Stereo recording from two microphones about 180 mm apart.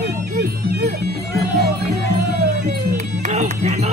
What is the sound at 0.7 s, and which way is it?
Music, 60° right (ahead or behind).